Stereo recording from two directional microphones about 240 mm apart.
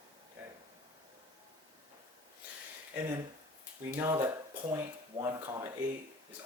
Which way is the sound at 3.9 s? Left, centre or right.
Centre.